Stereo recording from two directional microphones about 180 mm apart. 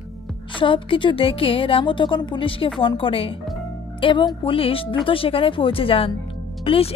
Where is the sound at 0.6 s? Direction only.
30° left (ahead or behind).